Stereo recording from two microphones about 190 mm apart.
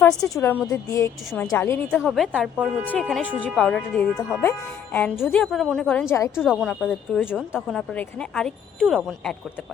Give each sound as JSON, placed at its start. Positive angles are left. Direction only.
{"t": 0.0, "sound": "a woman's voice", "side_deg": 15}
{"t": 2.0, "sound": "a woman's voice", "side_deg": 0}
{"t": 6.3, "sound": "a woman's voice", "side_deg": -5}